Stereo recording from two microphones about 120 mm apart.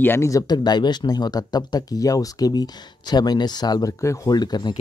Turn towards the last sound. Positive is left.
turn(degrees=35)  # may be behind; listen again after turning